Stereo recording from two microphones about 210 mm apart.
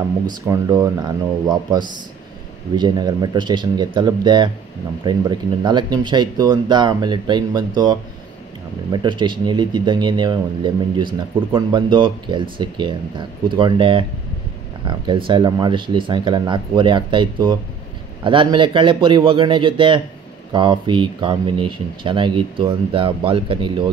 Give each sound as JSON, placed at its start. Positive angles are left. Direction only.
{"t": 0.5, "sound": "speech", "side_deg": -15}